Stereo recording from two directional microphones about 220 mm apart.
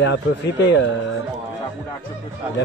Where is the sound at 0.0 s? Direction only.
55° left (ahead or behind).